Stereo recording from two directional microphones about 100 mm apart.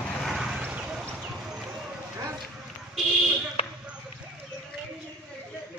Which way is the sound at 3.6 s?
75° left (ahead or behind).